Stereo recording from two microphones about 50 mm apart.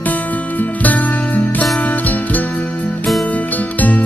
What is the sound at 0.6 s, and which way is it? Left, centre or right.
Music, left.